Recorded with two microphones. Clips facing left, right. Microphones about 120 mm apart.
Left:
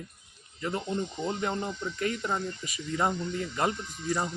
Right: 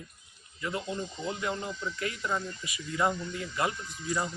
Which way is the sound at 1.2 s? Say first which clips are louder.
Left 3 dB; 60° left (ahead or behind).